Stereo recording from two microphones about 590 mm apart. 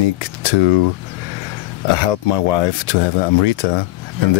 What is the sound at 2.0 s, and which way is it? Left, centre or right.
Speech, left.